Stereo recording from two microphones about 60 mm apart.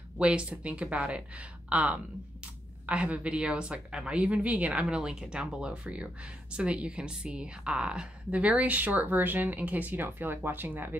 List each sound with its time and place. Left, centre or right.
0.2 s speech: centre; by 11.0 s right